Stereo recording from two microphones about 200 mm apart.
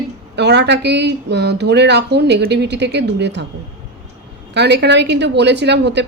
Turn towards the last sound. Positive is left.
turn(degrees=-60)  # may be behind; listen again after turning